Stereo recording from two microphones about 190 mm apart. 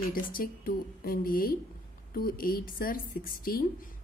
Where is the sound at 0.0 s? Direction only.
50° left (ahead or behind).